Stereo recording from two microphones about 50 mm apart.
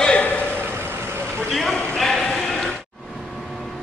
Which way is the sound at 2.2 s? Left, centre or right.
Centre.